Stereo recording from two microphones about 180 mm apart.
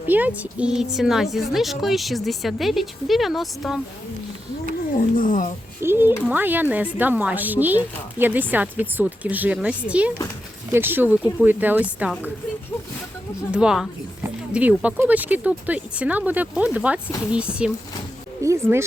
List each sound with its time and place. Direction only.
0.1 s a woman's voice: 10° right (ahead or behind)
5.1 s speech: 50° left (ahead or behind)
5.8 s speech: 10° right (ahead or behind)
13.5 s a woman's voice: 5° right (ahead or behind)